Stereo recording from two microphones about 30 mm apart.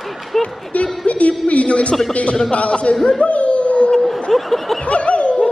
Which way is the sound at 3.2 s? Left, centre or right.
Left.